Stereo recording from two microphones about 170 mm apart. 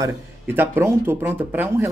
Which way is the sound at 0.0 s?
15° right (ahead or behind).